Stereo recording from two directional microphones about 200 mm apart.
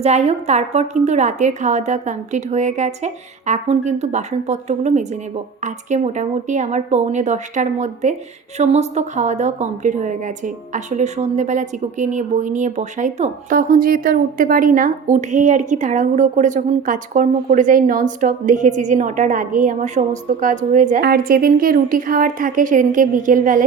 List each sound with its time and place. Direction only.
0.0 s a woman's voice: 30° right (ahead or behind)